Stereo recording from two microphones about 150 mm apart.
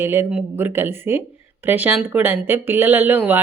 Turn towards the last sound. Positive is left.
turn(degrees=-10)  # may be behind; listen again after turning